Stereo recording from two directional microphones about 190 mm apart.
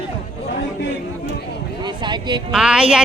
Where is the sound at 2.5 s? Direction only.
5° right (ahead or behind).